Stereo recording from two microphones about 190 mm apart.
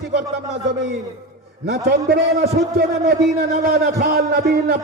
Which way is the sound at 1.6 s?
60° right (ahead or behind).